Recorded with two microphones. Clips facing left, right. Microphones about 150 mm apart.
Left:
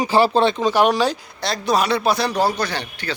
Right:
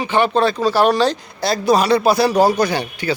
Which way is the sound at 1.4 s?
5° right (ahead or behind).